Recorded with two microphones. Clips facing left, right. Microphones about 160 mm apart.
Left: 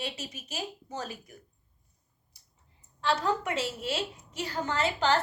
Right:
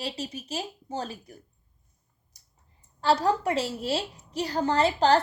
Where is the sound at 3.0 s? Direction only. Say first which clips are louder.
Right 5 dB; 35° right (ahead or behind).